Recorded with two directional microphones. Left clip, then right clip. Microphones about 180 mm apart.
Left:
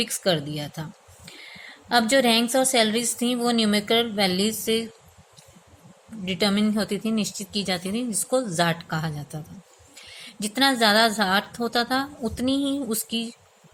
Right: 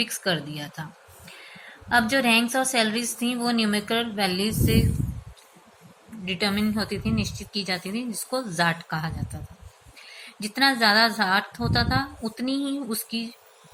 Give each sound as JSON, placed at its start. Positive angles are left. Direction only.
{"t": 0.0, "sound": "speech", "side_deg": 60}
{"t": 6.2, "sound": "a woman's voice", "side_deg": 55}